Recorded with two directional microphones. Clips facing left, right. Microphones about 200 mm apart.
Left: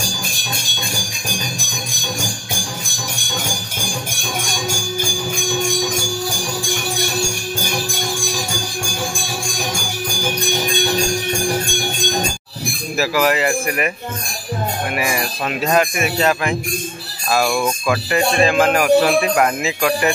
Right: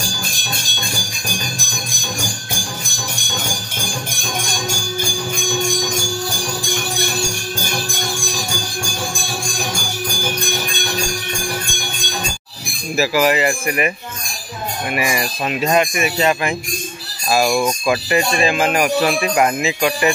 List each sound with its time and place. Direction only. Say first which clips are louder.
12.9 s speech: right 2 dB; 5° right (ahead or behind)
15.0 s speech: right 4 dB; 5° right (ahead or behind)
17.6 s speech: right 1 dB; 10° right (ahead or behind)